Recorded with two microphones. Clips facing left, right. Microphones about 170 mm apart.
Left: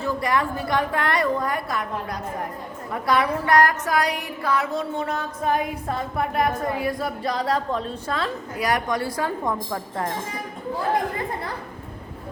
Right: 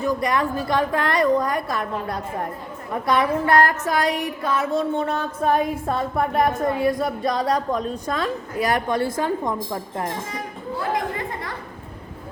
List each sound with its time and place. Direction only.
0.0 s a woman's voice: 20° right (ahead or behind)
6.3 s a woman's voice: 25° right (ahead or behind)